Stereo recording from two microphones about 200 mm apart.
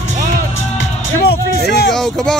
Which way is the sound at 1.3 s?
55° left (ahead or behind).